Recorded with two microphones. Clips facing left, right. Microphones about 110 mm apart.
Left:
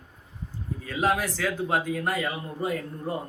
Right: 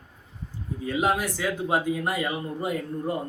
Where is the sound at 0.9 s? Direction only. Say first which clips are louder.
Even; 10° right (ahead or behind).